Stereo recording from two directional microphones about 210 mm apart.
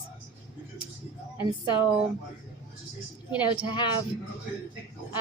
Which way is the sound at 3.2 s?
20° left (ahead or behind).